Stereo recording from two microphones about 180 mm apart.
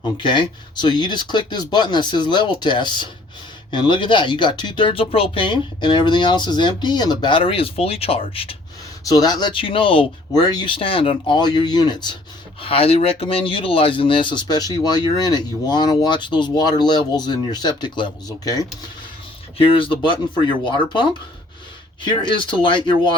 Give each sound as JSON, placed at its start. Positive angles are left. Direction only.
{"t": 0.2, "sound": "speech", "side_deg": 25}
{"t": 9.0, "sound": "speech", "side_deg": 20}